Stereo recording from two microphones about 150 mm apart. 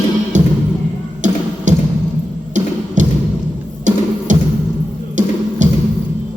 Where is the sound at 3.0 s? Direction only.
55° right (ahead or behind).